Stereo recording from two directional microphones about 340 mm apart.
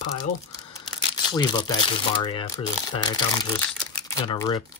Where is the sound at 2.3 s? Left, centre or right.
Centre.